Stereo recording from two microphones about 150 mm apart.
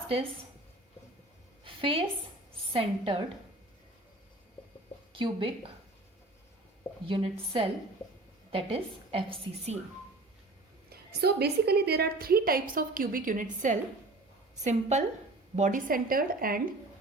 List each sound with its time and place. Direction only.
1.6 s a sound: 35° right (ahead or behind)
2.7 s a woman's voice: 40° right (ahead or behind)
5.1 s a woman's voice: 35° right (ahead or behind)
7.1 s a woman's voice: 35° right (ahead or behind)
10.8 s a woman's voice: 90° right; by 13.7 s 60° right (ahead or behind)
14.5 s a woman's voice: 50° right (ahead or behind); by 16.7 s 70° right (ahead or behind)